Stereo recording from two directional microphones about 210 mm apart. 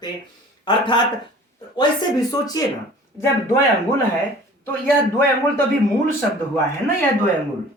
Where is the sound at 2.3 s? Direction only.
15° left (ahead or behind).